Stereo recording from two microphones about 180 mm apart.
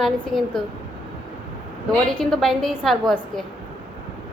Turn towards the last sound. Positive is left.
turn(degrees=0)  # may be behind; listen again after turning